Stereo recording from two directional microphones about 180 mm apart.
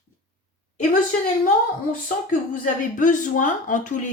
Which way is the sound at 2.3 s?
45° left (ahead or behind).